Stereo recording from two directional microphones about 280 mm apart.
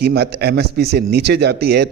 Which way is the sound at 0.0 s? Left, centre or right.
Right.